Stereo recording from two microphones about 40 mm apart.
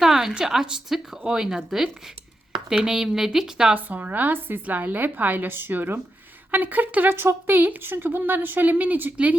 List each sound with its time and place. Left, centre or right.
0.0 s speech: centre
3.8 s a woman's voice: right
4.6 s a woman's voice: right
6.5 s a woman's voice: right
7.2 s a woman's voice: right